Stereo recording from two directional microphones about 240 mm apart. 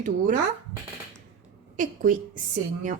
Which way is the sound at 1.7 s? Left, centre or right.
Right.